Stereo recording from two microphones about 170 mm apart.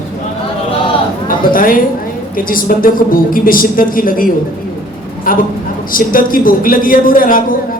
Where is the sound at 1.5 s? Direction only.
55° left (ahead or behind).